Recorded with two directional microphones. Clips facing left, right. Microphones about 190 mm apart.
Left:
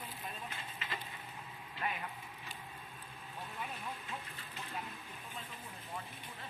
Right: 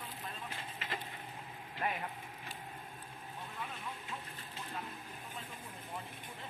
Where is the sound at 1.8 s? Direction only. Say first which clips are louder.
Right 3 dB; 45° right (ahead or behind).